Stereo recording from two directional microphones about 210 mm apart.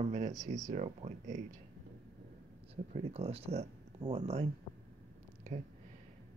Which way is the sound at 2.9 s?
30° right (ahead or behind).